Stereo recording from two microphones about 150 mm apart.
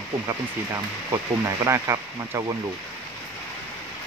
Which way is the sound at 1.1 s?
20° right (ahead or behind).